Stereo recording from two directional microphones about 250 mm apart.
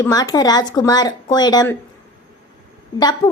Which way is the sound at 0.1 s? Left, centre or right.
Centre.